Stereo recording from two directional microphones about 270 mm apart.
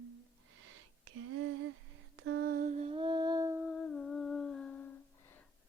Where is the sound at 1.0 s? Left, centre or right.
Right.